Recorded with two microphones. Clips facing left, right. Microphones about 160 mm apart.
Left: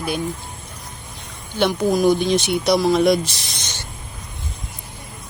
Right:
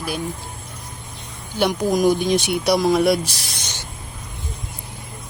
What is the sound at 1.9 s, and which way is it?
Speech, 10° right (ahead or behind).